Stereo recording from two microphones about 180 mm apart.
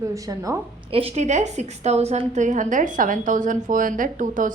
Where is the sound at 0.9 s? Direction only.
30° right (ahead or behind).